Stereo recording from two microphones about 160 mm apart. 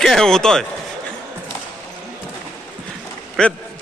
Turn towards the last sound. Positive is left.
turn(degrees=5)  # may be behind; listen again after turning